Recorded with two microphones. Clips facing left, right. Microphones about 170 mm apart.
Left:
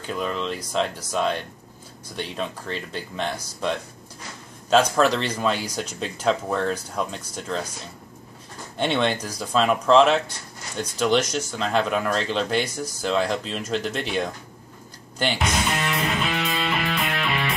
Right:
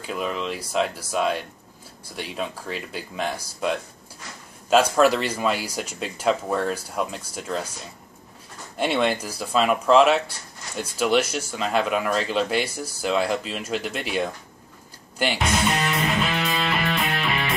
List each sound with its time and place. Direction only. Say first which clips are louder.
0.0 s speech: even; 5° right (ahead or behind)
8.7 s speech: even; 5° right (ahead or behind)
15.1 s music: right 1 dB; 5° right (ahead or behind)